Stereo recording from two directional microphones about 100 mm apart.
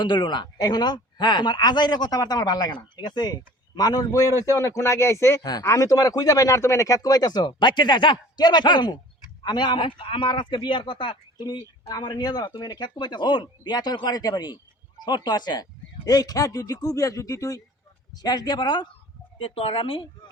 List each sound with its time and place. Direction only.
0.0 s speech: 50° left (ahead or behind); by 5.4 s 25° left (ahead or behind)
5.4 s a man's voice: 40° left (ahead or behind)
11.9 s speech: 40° left (ahead or behind)
19.4 s a man's voice: 70° left (ahead or behind)